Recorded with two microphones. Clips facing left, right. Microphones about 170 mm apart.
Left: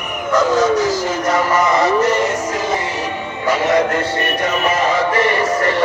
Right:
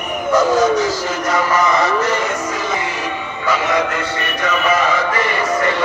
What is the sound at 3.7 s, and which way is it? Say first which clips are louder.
Music: left 3 dB; 50° left (ahead or behind).